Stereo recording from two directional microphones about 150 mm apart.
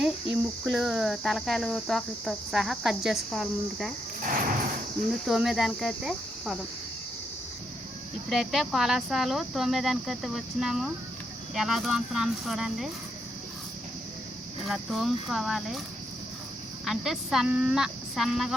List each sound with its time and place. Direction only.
0.0 s cricket: centre (ahead or behind)
4.2 s a sound: 65° right (ahead or behind)
5.2 s cricket: centre (ahead or behind)
8.3 s cricket: centre (ahead or behind)
14.6 s cricket: centre (ahead or behind)
16.8 s cricket: centre (ahead or behind)